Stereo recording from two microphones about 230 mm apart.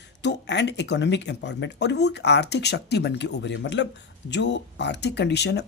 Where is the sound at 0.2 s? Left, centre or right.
Left.